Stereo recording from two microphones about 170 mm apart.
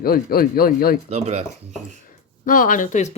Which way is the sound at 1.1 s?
40° right (ahead or behind).